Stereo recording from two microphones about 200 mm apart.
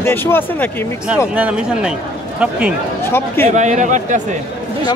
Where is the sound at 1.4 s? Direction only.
5° right (ahead or behind).